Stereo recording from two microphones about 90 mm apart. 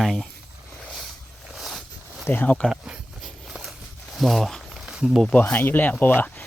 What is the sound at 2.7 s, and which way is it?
Walk, 10° right (ahead or behind).